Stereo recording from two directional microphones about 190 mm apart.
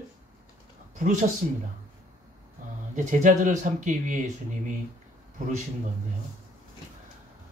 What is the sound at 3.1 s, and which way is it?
Speech, 45° right (ahead or behind).